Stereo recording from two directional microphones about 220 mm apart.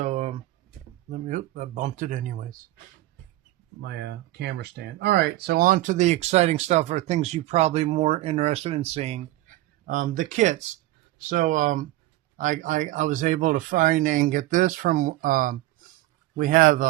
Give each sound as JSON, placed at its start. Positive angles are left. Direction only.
{"t": 0.0, "sound": "a sound", "side_deg": -30}
{"t": 1.1, "sound": "speech", "side_deg": -35}
{"t": 3.8, "sound": "speech", "side_deg": -50}